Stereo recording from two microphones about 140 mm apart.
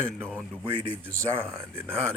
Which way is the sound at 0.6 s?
40° right (ahead or behind).